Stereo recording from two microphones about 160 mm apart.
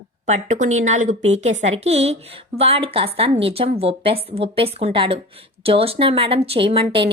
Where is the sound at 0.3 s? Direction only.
45° right (ahead or behind).